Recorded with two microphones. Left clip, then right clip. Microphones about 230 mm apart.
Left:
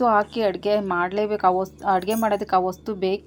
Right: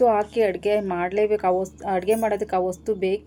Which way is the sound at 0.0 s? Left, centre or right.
Left.